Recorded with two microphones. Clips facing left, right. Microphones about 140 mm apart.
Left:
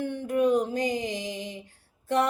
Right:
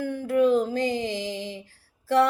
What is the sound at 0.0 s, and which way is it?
Music, 25° left (ahead or behind).